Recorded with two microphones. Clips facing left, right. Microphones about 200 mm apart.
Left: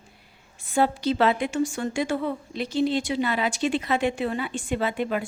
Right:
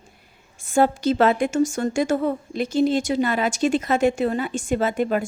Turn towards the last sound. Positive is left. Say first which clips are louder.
# right 4 dB
turn(degrees=-45)  # may be behind; listen again after turning